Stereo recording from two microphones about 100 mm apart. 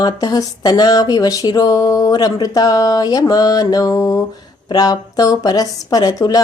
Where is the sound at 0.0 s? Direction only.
40° left (ahead or behind).